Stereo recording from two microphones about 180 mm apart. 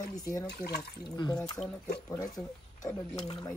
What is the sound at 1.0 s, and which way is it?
Speech, 25° left (ahead or behind).